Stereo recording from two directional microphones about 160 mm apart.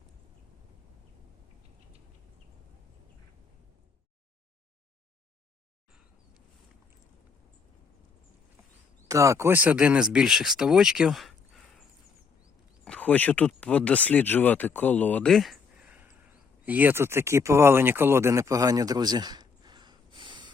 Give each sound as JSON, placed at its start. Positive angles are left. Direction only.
{"t": 9.0, "sound": "speech", "side_deg": -20}